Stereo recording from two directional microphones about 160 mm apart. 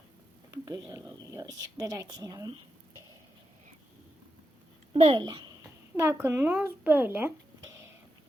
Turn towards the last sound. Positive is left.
turn(degrees=-15)  # may be behind; listen again after turning